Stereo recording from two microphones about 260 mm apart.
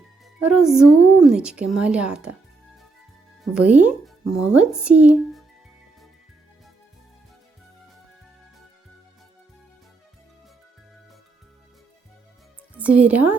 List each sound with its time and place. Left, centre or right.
0.3 s speech: centre
3.4 s speech: centre
12.7 s a woman's voice: centre